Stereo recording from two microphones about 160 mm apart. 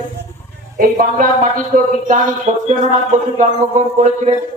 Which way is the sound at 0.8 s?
60° right (ahead or behind).